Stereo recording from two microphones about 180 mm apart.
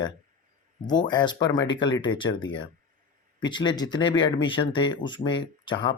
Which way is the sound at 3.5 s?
25° left (ahead or behind).